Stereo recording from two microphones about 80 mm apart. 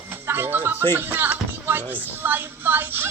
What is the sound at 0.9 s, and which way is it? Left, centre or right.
A child's voice, right.